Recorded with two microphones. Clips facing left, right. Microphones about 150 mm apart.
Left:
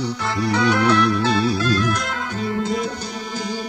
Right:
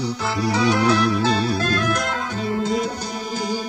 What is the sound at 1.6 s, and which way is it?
Music, 50° right (ahead or behind).